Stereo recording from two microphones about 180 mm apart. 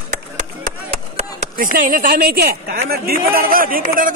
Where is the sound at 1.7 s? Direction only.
50° right (ahead or behind).